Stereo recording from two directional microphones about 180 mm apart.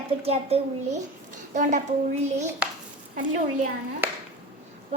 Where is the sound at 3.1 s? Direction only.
45° right (ahead or behind).